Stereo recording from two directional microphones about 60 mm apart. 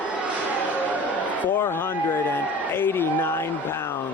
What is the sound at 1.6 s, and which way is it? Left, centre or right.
Speech, left.